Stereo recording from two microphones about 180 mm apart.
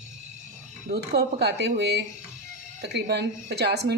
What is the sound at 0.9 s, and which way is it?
Speech, 65° right (ahead or behind).